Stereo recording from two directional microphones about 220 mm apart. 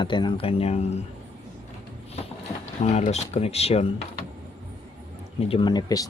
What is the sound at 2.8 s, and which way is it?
Speech, 30° left (ahead or behind).